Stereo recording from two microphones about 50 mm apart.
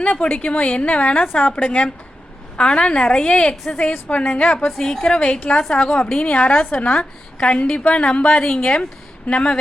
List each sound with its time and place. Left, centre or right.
0.0 s a woman's voice: left
4.8 s a woman's voice: centre
5.8 s a woman's voice: centre
6.2 s a woman's voice: left